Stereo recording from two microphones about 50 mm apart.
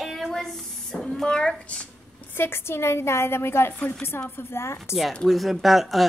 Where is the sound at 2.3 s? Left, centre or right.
Left.